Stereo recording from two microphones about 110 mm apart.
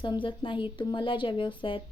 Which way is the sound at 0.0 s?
50° left (ahead or behind).